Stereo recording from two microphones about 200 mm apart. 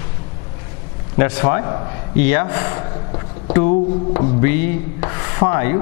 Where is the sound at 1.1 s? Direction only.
10° left (ahead or behind).